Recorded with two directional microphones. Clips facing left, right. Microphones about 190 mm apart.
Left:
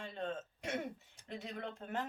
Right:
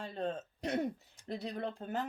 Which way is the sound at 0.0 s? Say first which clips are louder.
Right 4 dB; 35° right (ahead or behind).